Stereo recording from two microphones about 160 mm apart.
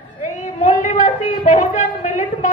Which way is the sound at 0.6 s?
50° left (ahead or behind).